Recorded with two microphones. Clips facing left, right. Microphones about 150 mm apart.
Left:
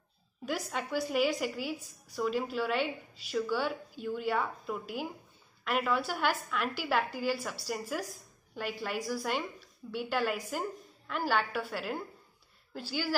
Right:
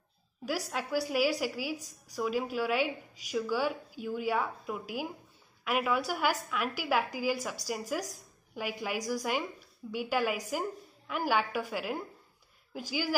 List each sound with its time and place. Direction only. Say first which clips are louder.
0.5 s a woman's voice: right 1 dB; 5° right (ahead or behind)